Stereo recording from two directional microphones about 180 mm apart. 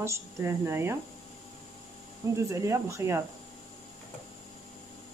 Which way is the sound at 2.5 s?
15° right (ahead or behind).